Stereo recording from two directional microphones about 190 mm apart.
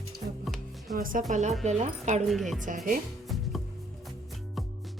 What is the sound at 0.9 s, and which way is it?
A woman's voice, 45° right (ahead or behind).